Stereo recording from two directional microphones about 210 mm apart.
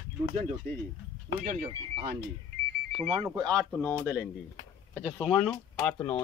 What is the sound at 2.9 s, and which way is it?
Speech, 30° right (ahead or behind).